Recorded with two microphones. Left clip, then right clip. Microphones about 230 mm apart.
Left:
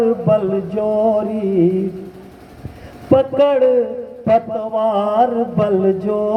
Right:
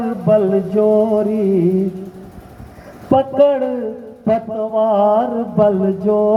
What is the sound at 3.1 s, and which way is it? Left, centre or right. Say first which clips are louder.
A man's voice: even; left.